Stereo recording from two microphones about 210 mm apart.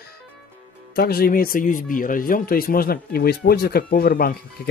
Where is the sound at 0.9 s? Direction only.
45° left (ahead or behind).